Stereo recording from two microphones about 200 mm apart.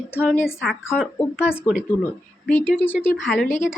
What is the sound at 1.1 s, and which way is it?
Speech, 5° right (ahead or behind).